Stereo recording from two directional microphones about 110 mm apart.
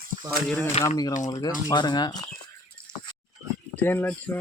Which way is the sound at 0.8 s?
75° left (ahead or behind).